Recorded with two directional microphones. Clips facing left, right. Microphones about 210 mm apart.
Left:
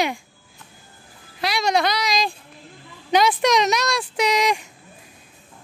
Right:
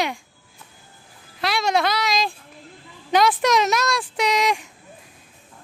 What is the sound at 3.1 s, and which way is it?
A woman's voice, centre (ahead or behind).